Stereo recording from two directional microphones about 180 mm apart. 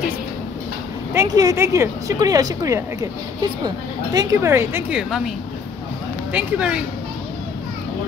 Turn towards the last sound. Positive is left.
turn(degrees=-5)  # may be behind; listen again after turning